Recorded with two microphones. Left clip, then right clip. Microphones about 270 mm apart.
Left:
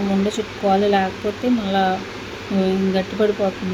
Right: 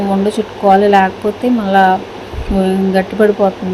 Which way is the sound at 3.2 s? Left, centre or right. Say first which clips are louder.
Right 8 dB; centre.